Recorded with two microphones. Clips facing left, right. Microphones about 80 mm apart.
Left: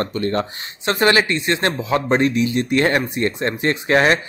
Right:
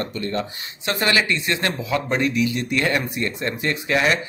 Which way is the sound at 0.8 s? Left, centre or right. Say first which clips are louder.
Left 5 dB; left.